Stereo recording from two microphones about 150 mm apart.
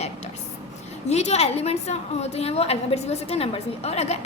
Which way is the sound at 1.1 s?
45° left (ahead or behind).